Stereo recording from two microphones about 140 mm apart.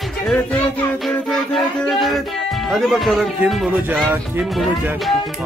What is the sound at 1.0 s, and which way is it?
Music, 5° left (ahead or behind).